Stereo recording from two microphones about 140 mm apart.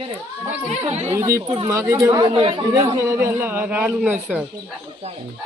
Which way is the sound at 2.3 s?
40° right (ahead or behind).